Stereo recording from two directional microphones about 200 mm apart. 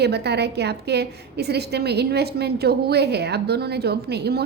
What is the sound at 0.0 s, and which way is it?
A woman's voice, 55° right (ahead or behind).